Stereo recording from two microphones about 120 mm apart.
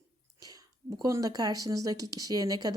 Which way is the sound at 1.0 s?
30° right (ahead or behind).